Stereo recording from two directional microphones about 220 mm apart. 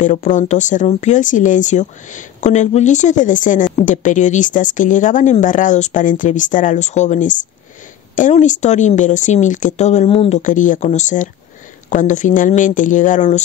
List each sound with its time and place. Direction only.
0.0 s speech: 35° left (ahead or behind)